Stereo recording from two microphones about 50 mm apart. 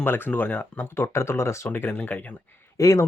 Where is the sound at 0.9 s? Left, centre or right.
Left.